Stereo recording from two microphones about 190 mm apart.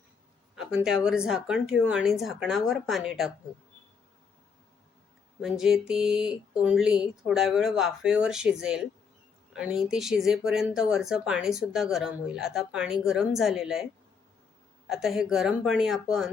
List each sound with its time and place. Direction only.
0.5 s a sound: 5° right (ahead or behind)
0.9 s speech: 5° right (ahead or behind)
5.4 s speech: centre (ahead or behind)
14.8 s speech: centre (ahead or behind)